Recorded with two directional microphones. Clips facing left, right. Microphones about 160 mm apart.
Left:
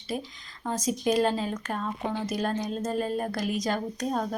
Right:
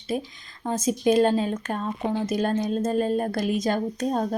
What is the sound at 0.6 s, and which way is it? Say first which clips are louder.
Speech: right 5 dB; 25° right (ahead or behind).